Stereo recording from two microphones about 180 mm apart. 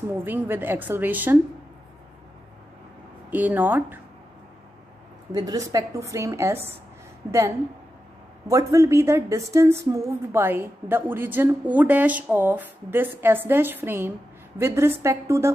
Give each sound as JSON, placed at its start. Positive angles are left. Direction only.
{"t": 0.2, "sound": "a woman's voice", "side_deg": -10}
{"t": 3.3, "sound": "a woman's voice", "side_deg": -10}
{"t": 5.3, "sound": "a woman's voice", "side_deg": -20}